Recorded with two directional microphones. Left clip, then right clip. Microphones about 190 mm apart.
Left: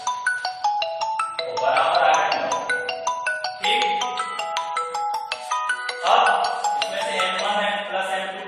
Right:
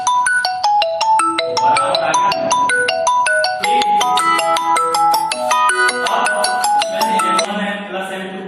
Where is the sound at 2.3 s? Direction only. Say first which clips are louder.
Right 8 dB; 50° right (ahead or behind).